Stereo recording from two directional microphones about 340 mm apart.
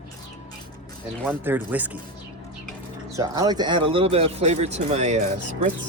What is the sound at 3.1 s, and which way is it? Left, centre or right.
A man's voice, centre.